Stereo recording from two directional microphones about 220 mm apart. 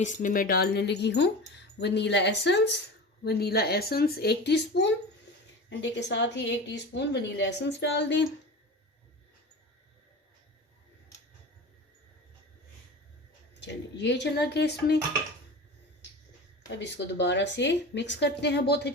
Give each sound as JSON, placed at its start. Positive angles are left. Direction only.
{"t": 0.0, "sound": "speech", "side_deg": 35}
{"t": 13.6, "sound": "speech", "side_deg": 50}
{"t": 16.6, "sound": "speech", "side_deg": 55}